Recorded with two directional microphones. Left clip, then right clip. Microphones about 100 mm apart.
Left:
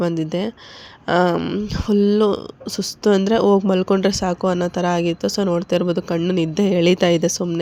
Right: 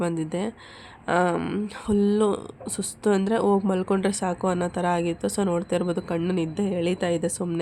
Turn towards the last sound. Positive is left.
turn(degrees=45)  # may be behind; listen again after turning